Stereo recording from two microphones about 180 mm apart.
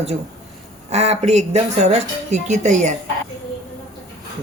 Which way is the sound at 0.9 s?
35° right (ahead or behind).